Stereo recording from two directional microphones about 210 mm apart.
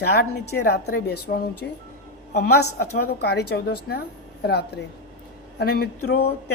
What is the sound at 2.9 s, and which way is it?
A woman's voice, 50° left (ahead or behind).